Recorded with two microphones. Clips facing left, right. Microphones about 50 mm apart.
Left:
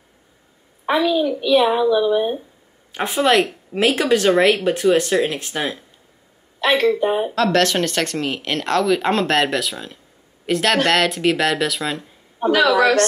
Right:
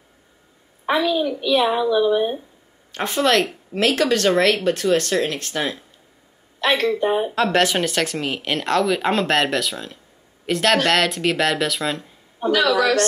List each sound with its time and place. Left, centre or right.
0.8 s speech: centre
7.3 s speech: centre
12.4 s a man's voice: left